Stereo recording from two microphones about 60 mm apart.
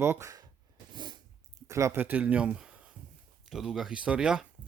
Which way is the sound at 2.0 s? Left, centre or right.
Right.